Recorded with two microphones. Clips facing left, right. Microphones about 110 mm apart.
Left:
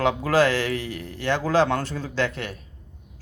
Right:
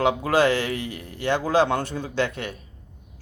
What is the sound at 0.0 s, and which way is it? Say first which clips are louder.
Speech: even; 20° right (ahead or behind).